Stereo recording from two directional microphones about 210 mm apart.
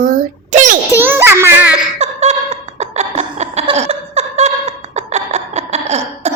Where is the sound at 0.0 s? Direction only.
40° right (ahead or behind).